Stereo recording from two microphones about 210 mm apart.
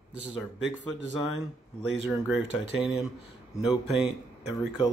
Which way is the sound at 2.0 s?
Centre (ahead or behind).